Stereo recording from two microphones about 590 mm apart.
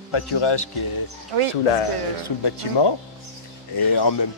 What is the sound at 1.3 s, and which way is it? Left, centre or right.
Speech, right.